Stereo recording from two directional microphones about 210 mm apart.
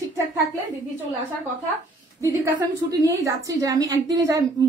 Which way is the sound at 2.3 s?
15° right (ahead or behind).